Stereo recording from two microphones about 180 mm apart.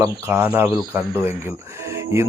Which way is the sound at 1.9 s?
15° right (ahead or behind).